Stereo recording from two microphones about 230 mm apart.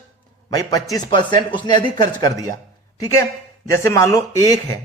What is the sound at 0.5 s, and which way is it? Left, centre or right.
A man's voice, centre.